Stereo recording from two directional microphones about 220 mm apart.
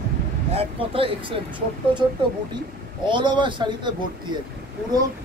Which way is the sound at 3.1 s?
20° right (ahead or behind).